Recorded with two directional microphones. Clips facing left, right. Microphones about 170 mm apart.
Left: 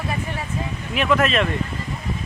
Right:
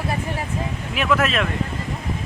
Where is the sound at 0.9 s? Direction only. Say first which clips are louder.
Left 2 dB; 5° right (ahead or behind).